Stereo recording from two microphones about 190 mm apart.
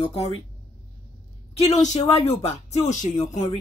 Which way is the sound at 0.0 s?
30° left (ahead or behind).